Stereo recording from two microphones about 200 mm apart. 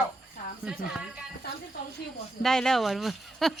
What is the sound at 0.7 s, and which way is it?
Speech, 5° right (ahead or behind).